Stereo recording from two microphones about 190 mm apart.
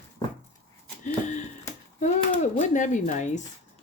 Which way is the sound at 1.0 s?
40° left (ahead or behind).